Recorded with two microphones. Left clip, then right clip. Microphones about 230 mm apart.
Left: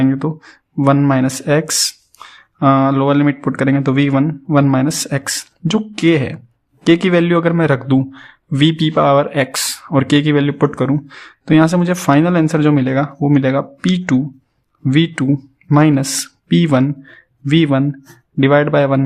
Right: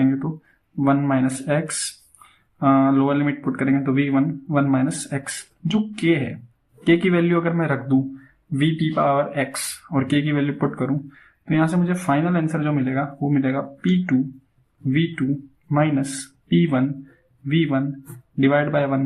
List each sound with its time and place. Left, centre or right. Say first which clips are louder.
0.0 s speech: left 5 dB; left